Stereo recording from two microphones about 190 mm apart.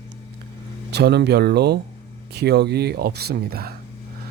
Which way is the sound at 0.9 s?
60° right (ahead or behind).